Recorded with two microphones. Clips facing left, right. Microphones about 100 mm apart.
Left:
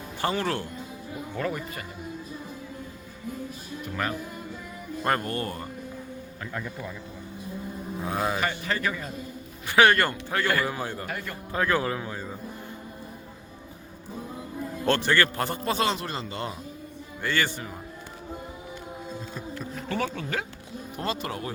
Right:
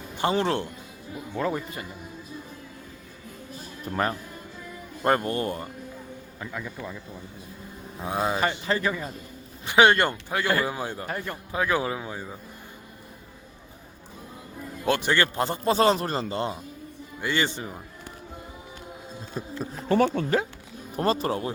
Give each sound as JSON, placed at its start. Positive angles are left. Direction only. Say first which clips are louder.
{"t": 0.2, "sound": "a man's voice", "louder": "right 3 dB", "side_deg": -20}
{"t": 4.0, "sound": "speech", "louder": "right 4 dB", "side_deg": -35}
{"t": 5.0, "sound": "a man's voice", "louder": "right 4 dB", "side_deg": -20}
{"t": 6.5, "sound": "speech", "louder": "left 1 dB", "side_deg": 0}
{"t": 8.0, "sound": "speech", "louder": "right 2 dB", "side_deg": -20}
{"t": 8.4, "sound": "a man's voice", "louder": "right 3 dB", "side_deg": -30}
{"t": 11.0, "sound": "a man's voice", "louder": "right 2 dB", "side_deg": -30}
{"t": 11.5, "sound": "speech", "louder": "even", "side_deg": -15}
{"t": 14.8, "sound": "a man's voice", "louder": "even", "side_deg": -15}
{"t": 15.6, "sound": "speech", "louder": "right 7 dB", "side_deg": -35}
{"t": 17.2, "sound": "a man's voice", "louder": "right 1 dB", "side_deg": -15}
{"t": 19.5, "sound": "speech", "louder": "right 8 dB", "side_deg": -35}